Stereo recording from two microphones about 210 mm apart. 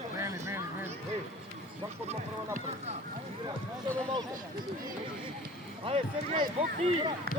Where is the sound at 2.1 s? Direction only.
30° right (ahead or behind).